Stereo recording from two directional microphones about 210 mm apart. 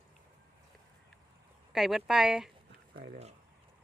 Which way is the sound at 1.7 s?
Centre (ahead or behind).